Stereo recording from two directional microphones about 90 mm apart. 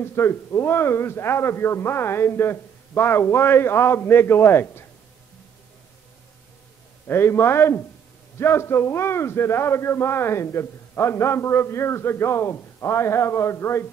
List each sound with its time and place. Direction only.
0.0 s a man's voice: 30° left (ahead or behind)
7.1 s a man's voice: 25° left (ahead or behind)